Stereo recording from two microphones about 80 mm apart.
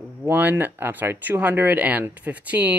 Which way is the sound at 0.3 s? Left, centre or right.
Right.